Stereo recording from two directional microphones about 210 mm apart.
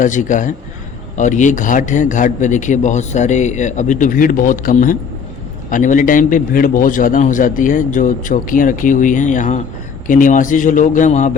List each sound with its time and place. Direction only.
0.0 s a man's voice: 35° left (ahead or behind)